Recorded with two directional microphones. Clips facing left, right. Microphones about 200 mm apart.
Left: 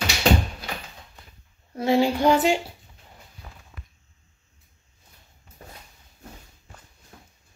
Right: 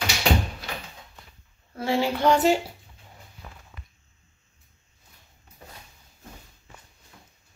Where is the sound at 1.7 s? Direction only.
15° left (ahead or behind).